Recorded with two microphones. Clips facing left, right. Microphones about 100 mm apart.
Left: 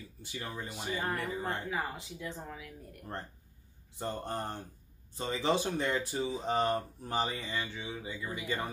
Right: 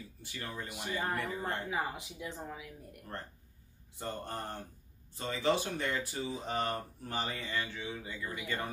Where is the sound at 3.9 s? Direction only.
25° left (ahead or behind).